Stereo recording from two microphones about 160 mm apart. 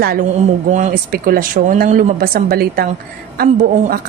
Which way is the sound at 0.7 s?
55° right (ahead or behind).